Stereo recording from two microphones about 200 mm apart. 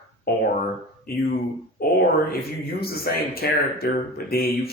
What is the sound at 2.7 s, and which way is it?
Speech, 50° left (ahead or behind).